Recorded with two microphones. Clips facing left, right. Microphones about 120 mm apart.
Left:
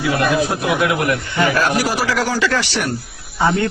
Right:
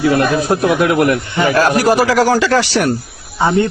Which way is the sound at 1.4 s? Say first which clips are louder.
Right 4 dB; 35° right (ahead or behind).